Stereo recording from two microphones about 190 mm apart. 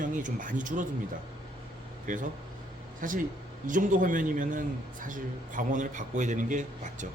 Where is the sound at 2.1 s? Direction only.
45° right (ahead or behind).